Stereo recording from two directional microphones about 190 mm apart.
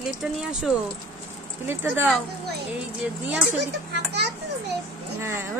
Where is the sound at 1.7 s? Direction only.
10° right (ahead or behind).